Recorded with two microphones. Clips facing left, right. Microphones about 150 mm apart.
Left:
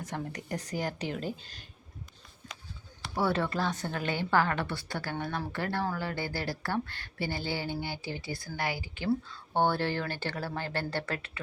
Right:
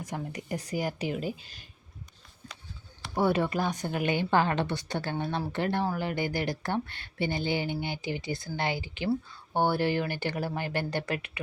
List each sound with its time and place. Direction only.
0.0 s speech: 10° right (ahead or behind)
3.2 s speech: 15° right (ahead or behind)
9.0 s speech: 10° right (ahead or behind)